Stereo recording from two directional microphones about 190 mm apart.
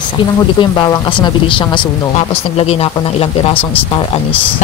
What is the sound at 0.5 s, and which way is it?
Speech, 20° left (ahead or behind).